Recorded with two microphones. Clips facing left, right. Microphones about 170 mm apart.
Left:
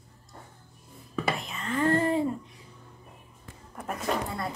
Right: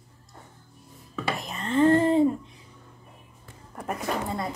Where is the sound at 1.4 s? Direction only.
40° right (ahead or behind).